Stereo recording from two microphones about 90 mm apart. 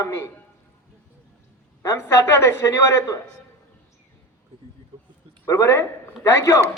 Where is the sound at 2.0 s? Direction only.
30° left (ahead or behind).